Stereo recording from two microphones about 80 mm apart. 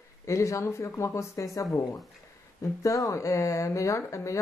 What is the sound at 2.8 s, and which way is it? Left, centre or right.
Speech, left.